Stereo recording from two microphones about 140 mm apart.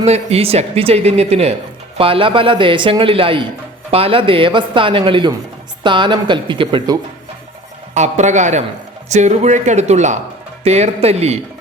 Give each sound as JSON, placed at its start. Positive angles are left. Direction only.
{"t": 0.0, "sound": "speech", "side_deg": -50}
{"t": 7.9, "sound": "speech", "side_deg": -55}